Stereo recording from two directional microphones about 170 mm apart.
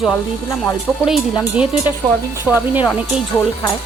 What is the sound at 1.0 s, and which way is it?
Speech, 5° right (ahead or behind).